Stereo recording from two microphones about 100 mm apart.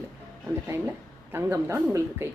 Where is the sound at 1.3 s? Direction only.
25° right (ahead or behind).